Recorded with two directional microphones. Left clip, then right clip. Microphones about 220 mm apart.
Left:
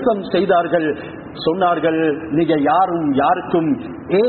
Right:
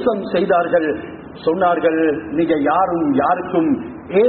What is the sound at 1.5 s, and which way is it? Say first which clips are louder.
A man's voice: right 1 dB; 40° left (ahead or behind).